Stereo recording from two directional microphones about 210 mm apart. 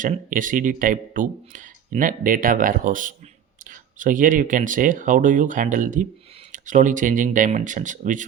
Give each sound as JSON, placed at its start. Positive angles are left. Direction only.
{"t": 0.0, "sound": "speech", "side_deg": -40}